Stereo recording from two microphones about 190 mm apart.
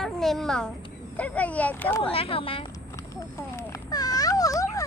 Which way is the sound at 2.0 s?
30° left (ahead or behind).